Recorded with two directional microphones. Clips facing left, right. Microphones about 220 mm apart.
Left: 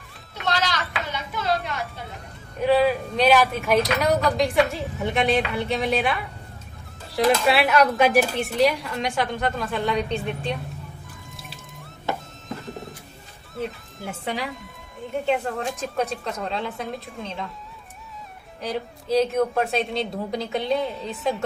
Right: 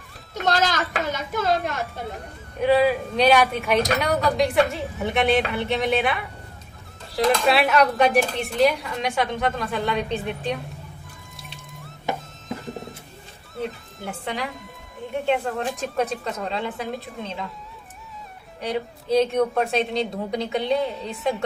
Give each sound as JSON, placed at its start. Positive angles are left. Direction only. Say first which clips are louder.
{"t": 0.3, "sound": "a sound", "louder": "right 4 dB", "side_deg": -45}
{"t": 2.6, "sound": "speech", "louder": "right 1 dB", "side_deg": 0}
{"t": 11.3, "sound": "music", "louder": "even", "side_deg": 0}
{"t": 12.4, "sound": "a sound", "louder": "right 2 dB", "side_deg": 0}
{"t": 13.6, "sound": "speech", "louder": "even", "side_deg": 0}
{"t": 18.6, "sound": "speech", "louder": "right 2 dB", "side_deg": 0}